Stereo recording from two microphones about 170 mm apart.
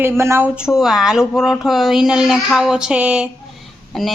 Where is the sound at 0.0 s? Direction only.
15° right (ahead or behind).